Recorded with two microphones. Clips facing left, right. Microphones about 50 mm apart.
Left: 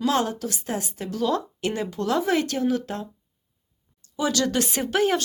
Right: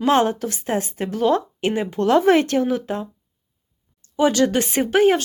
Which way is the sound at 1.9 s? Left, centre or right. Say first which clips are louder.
Right 9 dB; right.